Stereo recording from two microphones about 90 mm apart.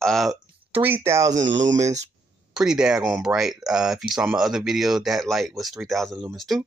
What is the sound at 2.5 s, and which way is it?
Speech, 5° right (ahead or behind).